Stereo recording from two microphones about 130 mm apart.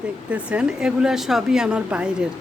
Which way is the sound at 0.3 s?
10° right (ahead or behind).